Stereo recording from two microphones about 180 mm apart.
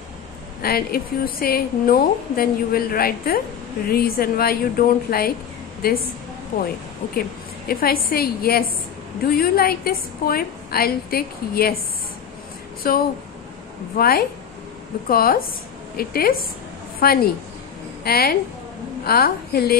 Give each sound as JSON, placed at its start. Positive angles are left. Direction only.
{"t": 0.6, "sound": "a woman's voice", "side_deg": 55}
{"t": 7.2, "sound": "a woman's voice", "side_deg": 55}
{"t": 12.8, "sound": "a woman's voice", "side_deg": 55}